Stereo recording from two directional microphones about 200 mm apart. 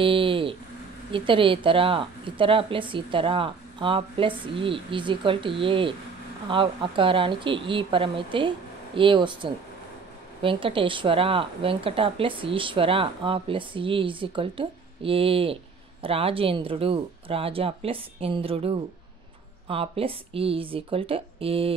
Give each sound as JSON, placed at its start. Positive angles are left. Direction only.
{"t": 0.0, "sound": "a woman's voice", "side_deg": -25}